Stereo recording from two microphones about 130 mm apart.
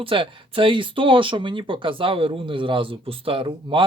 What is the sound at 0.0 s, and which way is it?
Speech, 45° right (ahead or behind).